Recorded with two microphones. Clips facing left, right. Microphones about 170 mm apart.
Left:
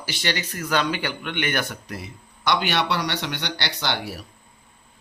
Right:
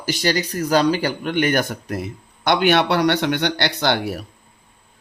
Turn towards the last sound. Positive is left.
turn(degrees=-55)  # may be behind; listen again after turning